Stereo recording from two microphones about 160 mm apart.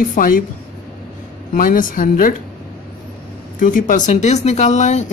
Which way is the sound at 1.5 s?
60° left (ahead or behind).